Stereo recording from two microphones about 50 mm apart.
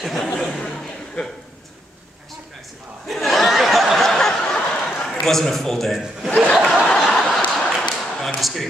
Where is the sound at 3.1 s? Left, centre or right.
Centre.